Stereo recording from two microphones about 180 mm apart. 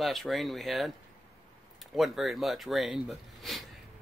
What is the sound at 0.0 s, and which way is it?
Speech, centre (ahead or behind).